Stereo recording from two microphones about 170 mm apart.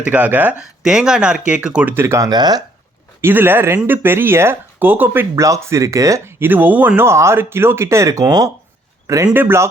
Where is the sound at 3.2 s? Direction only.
10° right (ahead or behind).